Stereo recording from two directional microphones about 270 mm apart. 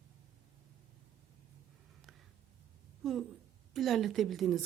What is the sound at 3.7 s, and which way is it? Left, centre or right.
Speech, centre.